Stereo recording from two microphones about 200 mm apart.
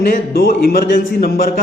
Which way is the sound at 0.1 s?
50° left (ahead or behind).